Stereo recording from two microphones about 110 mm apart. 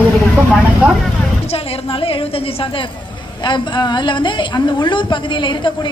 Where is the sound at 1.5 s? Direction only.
60° left (ahead or behind).